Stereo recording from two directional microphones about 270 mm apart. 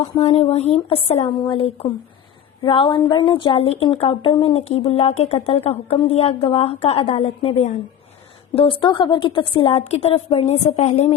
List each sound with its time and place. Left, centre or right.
0.0 s a woman's voice: left
8.5 s a woman's voice: centre